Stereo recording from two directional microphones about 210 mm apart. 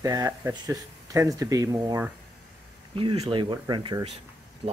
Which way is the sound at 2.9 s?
25° right (ahead or behind).